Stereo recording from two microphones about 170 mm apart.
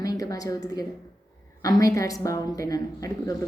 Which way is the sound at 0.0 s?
20° left (ahead or behind).